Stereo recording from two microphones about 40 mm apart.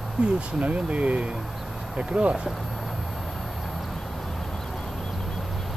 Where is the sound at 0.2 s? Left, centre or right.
Right.